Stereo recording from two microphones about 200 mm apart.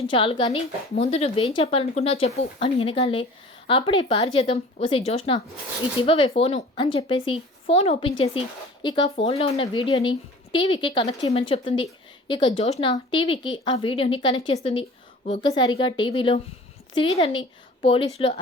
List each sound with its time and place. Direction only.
0.1 s a woman's voice: 25° left (ahead or behind)